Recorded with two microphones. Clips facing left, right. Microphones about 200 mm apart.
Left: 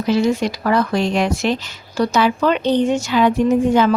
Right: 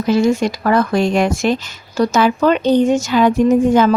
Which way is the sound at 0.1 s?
45° right (ahead or behind).